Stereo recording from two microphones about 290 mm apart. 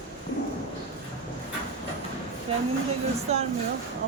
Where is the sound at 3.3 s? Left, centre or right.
Right.